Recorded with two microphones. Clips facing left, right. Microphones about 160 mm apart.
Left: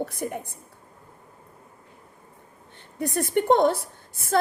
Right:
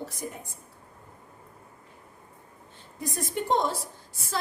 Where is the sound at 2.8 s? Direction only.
65° left (ahead or behind).